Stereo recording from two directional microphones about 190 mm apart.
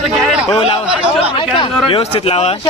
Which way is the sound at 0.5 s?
30° left (ahead or behind).